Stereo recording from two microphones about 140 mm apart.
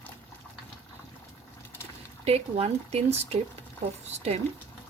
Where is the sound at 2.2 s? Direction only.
45° right (ahead or behind).